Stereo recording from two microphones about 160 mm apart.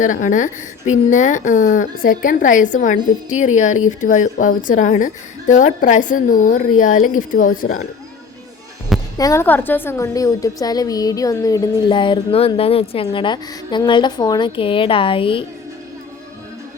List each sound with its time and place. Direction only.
0.0 s a woman's voice: 55° left (ahead or behind)
9.1 s a woman's voice: 20° left (ahead or behind)